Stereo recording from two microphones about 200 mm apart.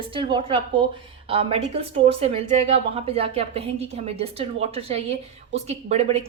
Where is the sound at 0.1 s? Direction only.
25° right (ahead or behind).